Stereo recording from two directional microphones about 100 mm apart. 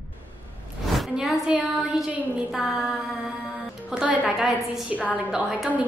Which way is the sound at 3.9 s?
10° right (ahead or behind).